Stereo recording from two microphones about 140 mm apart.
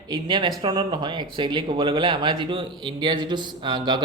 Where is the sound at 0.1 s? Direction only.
35° right (ahead or behind).